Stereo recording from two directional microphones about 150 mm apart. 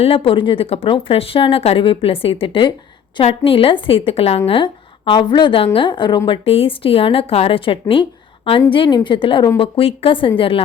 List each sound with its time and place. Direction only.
0.0 s a woman's voice: 40° left (ahead or behind)